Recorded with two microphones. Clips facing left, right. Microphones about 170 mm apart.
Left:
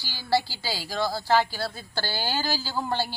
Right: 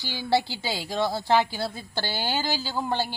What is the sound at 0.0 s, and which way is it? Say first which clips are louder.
Speech: right 8 dB; 55° right (ahead or behind).